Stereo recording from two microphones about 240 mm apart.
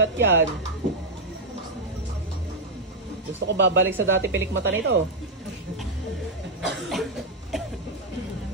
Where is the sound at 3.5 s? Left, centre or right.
Right.